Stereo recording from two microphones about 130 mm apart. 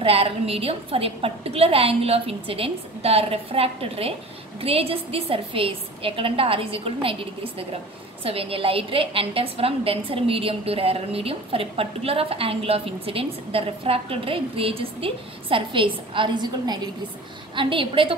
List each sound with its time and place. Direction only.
0.0 s a woman's voice: 45° right (ahead or behind)